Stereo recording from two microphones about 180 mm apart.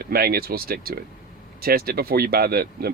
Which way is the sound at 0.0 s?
60° right (ahead or behind).